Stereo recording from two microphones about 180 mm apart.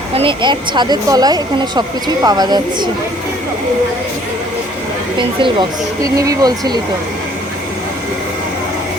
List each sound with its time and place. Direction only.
0.1 s speech: 30° right (ahead or behind)
5.4 s speech: 20° right (ahead or behind)